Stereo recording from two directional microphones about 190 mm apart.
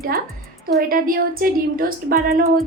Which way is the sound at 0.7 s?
50° right (ahead or behind).